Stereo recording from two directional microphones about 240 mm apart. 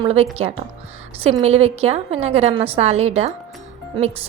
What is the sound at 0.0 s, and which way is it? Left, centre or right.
Speech, right.